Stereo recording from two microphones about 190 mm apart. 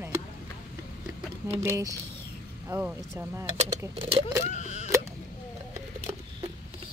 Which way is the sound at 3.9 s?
30° right (ahead or behind).